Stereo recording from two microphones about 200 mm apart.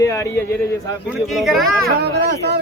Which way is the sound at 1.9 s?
55° right (ahead or behind).